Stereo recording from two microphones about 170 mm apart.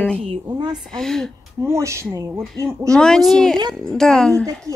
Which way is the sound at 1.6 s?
15° right (ahead or behind).